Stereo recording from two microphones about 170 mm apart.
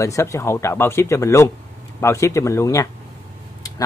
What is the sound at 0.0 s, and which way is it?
Speech, 20° left (ahead or behind).